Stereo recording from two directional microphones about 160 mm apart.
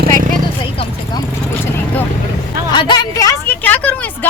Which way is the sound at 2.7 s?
30° left (ahead or behind).